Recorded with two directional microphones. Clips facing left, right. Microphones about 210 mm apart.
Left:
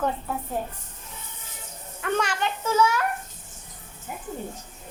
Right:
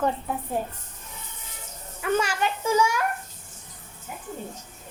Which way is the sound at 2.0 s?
5° right (ahead or behind).